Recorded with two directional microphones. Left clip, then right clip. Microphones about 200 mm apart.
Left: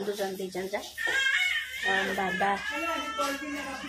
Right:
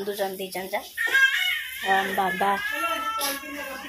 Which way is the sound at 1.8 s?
30° right (ahead or behind).